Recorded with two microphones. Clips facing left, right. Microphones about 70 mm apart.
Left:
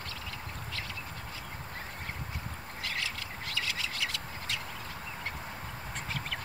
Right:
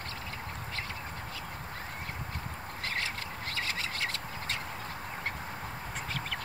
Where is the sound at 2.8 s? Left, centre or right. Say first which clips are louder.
Right 2 dB; right.